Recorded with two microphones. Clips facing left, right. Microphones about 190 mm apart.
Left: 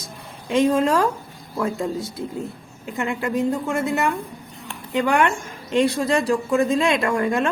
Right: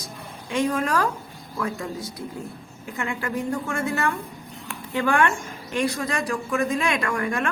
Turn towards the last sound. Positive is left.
turn(degrees=25)  # may be behind; listen again after turning